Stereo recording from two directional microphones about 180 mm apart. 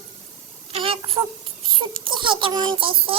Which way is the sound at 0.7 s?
30° right (ahead or behind).